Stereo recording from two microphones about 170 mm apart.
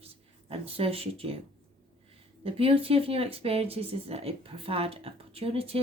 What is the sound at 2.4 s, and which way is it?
Speech, 35° right (ahead or behind).